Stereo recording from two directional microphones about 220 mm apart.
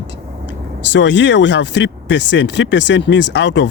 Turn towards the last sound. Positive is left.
turn(degrees=55)  # may be behind; listen again after turning